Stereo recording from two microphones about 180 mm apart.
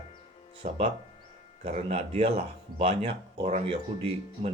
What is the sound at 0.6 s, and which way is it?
Speech, 40° right (ahead or behind).